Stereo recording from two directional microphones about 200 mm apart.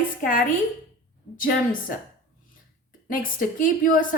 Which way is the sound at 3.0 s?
45° left (ahead or behind).